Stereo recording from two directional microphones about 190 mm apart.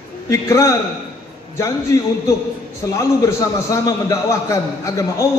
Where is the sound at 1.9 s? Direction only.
15° left (ahead or behind).